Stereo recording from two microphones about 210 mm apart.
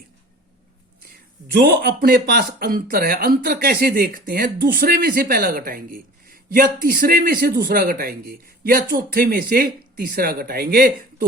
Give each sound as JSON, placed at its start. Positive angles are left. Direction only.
{"t": 1.5, "sound": "speech", "side_deg": -50}